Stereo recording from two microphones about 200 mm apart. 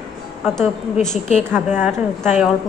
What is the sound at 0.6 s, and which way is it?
Speech, centre (ahead or behind).